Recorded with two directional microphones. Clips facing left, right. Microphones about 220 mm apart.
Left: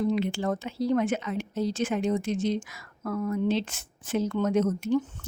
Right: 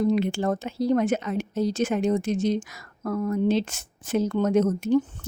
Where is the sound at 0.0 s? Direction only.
45° right (ahead or behind).